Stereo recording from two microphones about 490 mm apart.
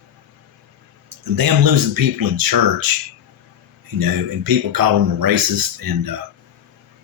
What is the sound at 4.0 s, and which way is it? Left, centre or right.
A man's voice, right.